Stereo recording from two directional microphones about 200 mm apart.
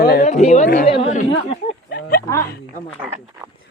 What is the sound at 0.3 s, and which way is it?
Speech, 35° left (ahead or behind).